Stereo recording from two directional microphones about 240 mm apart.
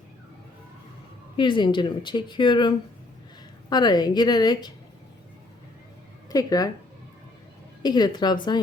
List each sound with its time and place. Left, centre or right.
1.4 s a woman's voice: centre
6.2 s speech: centre
7.8 s a woman's voice: centre